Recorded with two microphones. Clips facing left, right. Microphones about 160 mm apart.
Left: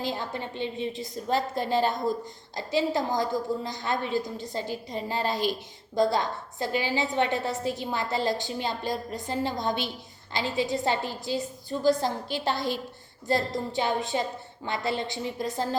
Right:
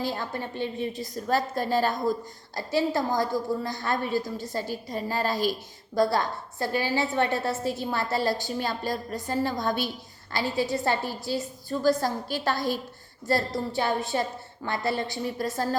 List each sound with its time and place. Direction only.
0.0 s a woman's voice: 20° left (ahead or behind)